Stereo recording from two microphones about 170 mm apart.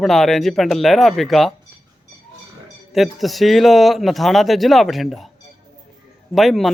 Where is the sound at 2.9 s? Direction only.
Centre (ahead or behind).